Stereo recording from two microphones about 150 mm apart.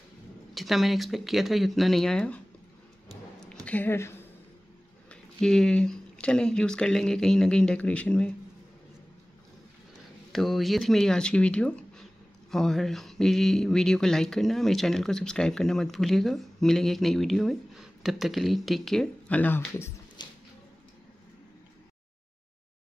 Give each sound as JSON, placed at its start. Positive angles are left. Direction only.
{"t": 0.6, "sound": "speech", "side_deg": 0}
{"t": 3.6, "sound": "a woman's voice", "side_deg": 10}
{"t": 5.1, "sound": "speech", "side_deg": 5}
{"t": 10.3, "sound": "speech", "side_deg": 0}
{"t": 20.2, "sound": "a sound", "side_deg": 30}